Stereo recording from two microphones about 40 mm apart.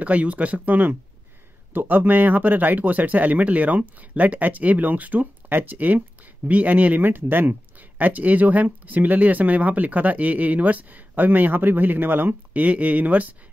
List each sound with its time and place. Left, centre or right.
0.0 s speech: right
12.5 s speech: right